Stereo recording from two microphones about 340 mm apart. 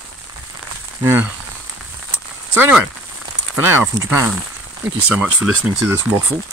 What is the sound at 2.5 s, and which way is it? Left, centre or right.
Speech, centre.